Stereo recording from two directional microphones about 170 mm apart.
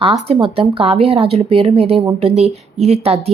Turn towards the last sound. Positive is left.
turn(degrees=-35)  # may be behind; listen again after turning